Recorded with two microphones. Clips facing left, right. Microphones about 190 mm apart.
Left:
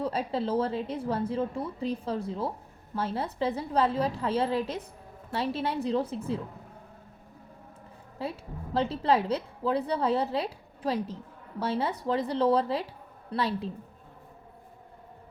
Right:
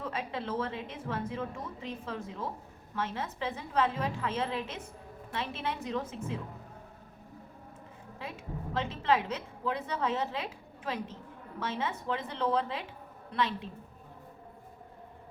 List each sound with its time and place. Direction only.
0.0 s a woman's voice: 35° left (ahead or behind)
8.2 s a woman's voice: 35° left (ahead or behind)